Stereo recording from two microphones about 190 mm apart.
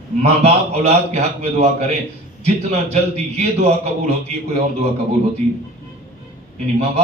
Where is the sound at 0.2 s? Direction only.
35° right (ahead or behind).